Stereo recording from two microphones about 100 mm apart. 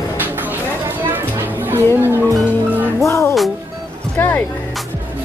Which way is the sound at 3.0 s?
30° left (ahead or behind).